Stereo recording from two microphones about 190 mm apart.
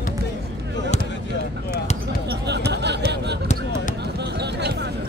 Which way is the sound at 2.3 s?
60° right (ahead or behind).